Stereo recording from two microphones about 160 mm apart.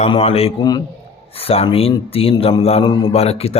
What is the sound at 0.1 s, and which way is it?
Speech, 40° left (ahead or behind).